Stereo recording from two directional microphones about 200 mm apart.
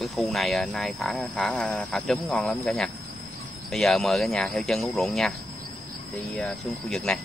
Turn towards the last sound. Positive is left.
turn(degrees=5)  # may be behind; listen again after turning